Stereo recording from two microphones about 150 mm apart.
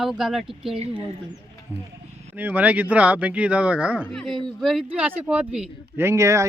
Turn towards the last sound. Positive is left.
turn(degrees=-20)  # may be behind; listen again after turning